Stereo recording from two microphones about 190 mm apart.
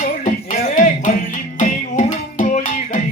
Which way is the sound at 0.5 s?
40° left (ahead or behind).